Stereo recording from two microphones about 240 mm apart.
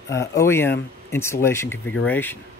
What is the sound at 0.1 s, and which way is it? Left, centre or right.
Speech, centre.